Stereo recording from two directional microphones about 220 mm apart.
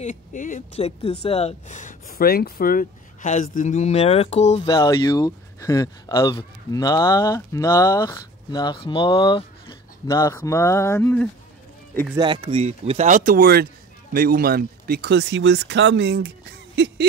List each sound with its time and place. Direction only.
0.0 s speech: 35° left (ahead or behind)
4.6 s speech: 15° left (ahead or behind)
12.2 s speech: 20° right (ahead or behind); by 16.9 s 50° right (ahead or behind)